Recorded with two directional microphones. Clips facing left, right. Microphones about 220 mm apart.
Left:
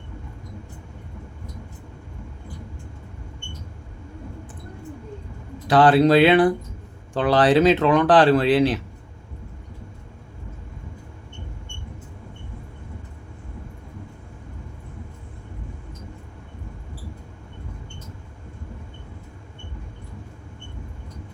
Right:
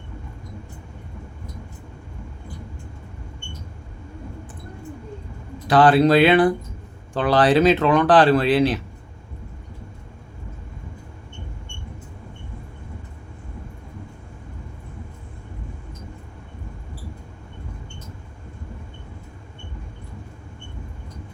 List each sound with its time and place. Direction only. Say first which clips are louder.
5.6 s speech: even; 25° left (ahead or behind)